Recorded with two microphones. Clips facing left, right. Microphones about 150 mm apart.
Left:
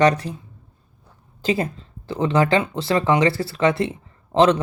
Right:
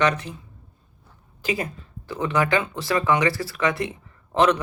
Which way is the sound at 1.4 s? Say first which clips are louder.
Left 5 dB; 30° left (ahead or behind).